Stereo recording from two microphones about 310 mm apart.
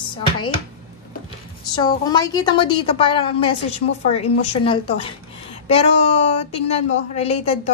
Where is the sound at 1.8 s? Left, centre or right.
Centre.